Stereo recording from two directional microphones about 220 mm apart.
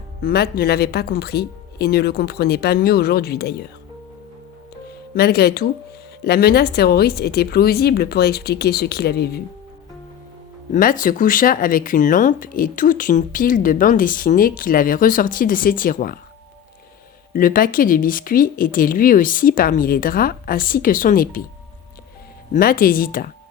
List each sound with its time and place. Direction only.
0.2 s speech: 45° left (ahead or behind)
5.1 s speech: 45° left (ahead or behind)
10.7 s speech: 40° left (ahead or behind)
17.3 s speech: 40° left (ahead or behind)
22.5 s speech: 40° left (ahead or behind)